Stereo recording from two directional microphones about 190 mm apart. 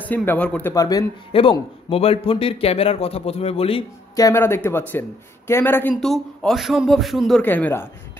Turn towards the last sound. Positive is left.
turn(degrees=10)  # may be behind; listen again after turning